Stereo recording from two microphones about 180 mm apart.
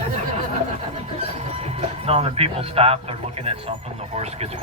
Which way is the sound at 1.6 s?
35° right (ahead or behind).